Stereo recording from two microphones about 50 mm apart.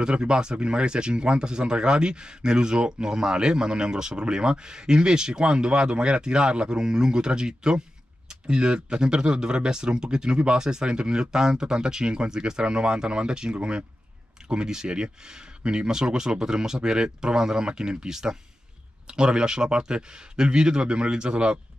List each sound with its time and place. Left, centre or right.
0.0 s speech: centre